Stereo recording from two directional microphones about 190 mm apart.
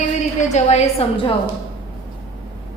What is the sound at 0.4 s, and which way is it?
Speech, 35° left (ahead or behind).